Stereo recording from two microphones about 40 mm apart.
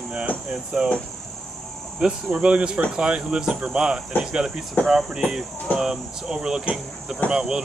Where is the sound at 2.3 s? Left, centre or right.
Right.